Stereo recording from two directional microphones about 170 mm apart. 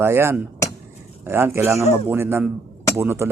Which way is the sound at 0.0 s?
15° right (ahead or behind).